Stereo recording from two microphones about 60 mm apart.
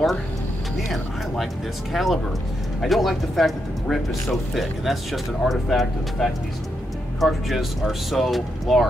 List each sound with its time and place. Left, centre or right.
2.0 s speech: centre